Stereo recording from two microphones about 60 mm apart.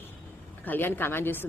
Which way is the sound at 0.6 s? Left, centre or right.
Left.